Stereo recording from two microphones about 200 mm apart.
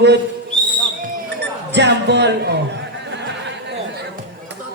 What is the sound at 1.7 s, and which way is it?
Speech, 60° right (ahead or behind).